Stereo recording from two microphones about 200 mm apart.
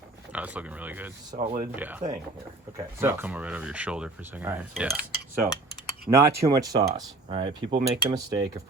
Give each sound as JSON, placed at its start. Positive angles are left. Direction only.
{"t": 0.3, "sound": "speech", "side_deg": -5}
{"t": 1.4, "sound": "speech", "side_deg": -35}
{"t": 1.7, "sound": "speech", "side_deg": -10}